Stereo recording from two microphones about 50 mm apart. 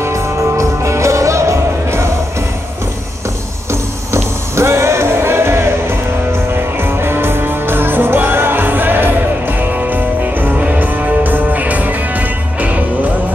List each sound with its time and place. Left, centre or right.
0.0 s music: right
4.1 s music: right